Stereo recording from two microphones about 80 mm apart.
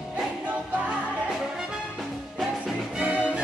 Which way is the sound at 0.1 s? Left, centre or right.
Centre.